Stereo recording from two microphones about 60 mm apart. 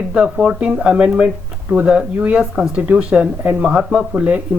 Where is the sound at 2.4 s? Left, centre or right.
Centre.